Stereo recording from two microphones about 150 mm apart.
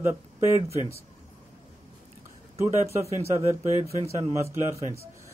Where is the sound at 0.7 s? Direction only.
45° left (ahead or behind).